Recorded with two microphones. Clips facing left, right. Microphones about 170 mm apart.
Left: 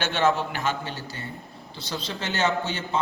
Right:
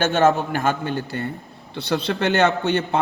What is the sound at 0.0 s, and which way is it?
A man's voice, 45° right (ahead or behind).